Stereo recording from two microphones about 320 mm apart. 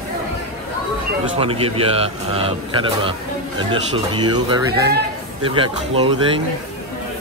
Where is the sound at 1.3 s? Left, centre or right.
Centre.